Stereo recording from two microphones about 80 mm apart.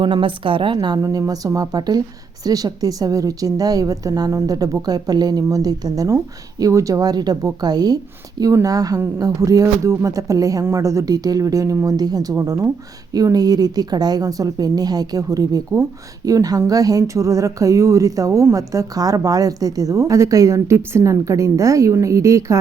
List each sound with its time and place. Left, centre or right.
0.0 s a woman's voice: right
1.0 s speech: right
12.4 s speech: right
13.1 s speech: right